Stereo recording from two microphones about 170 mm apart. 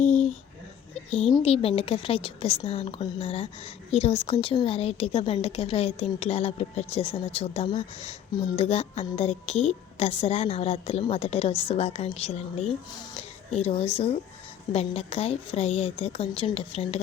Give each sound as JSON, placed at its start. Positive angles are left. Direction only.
{"t": 1.4, "sound": "a woman's voice", "side_deg": 35}